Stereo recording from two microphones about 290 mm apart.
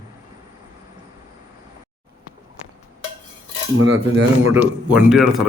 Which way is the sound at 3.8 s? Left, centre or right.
Right.